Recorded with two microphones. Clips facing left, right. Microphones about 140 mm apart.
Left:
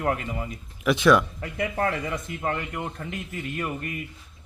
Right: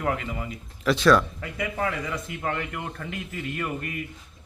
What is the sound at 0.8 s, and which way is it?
Speech, 20° left (ahead or behind).